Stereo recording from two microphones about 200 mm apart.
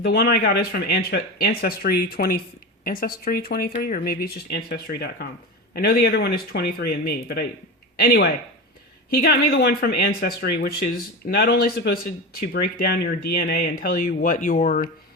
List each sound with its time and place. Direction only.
0.0 s speech: 50° left (ahead or behind)